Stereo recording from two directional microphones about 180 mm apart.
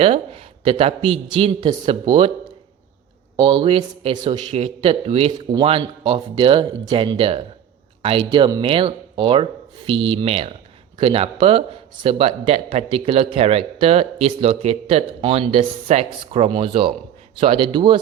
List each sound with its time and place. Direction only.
0.0 s speech: 35° right (ahead or behind)
3.3 s speech: 35° right (ahead or behind)